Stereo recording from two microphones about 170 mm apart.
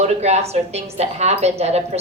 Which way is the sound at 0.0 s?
40° right (ahead or behind).